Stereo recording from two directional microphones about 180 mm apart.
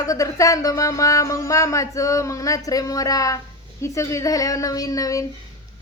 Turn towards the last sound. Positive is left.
turn(degrees=20)  # may be behind; listen again after turning